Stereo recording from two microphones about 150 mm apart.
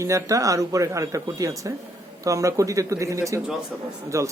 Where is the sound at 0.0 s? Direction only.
20° right (ahead or behind).